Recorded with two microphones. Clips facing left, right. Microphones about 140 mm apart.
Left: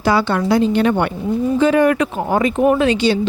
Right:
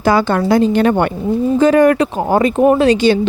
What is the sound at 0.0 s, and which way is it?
A woman's voice, 50° right (ahead or behind).